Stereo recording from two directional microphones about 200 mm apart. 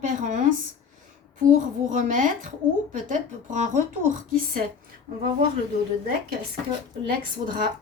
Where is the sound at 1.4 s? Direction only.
40° right (ahead or behind).